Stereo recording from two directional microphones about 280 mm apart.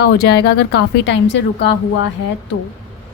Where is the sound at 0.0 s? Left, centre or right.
Left.